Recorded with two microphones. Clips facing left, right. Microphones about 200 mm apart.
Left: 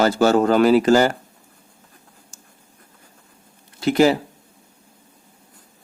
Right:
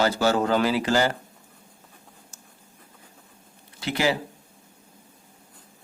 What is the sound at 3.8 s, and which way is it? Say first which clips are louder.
Speech: left 9 dB; 45° left (ahead or behind).